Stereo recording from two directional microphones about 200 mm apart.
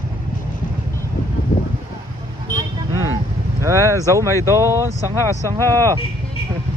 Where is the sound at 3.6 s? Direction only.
15° right (ahead or behind).